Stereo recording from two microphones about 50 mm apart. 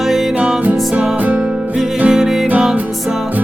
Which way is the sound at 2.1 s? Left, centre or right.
Centre.